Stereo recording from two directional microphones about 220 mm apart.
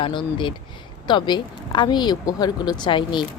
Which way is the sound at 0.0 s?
20° left (ahead or behind).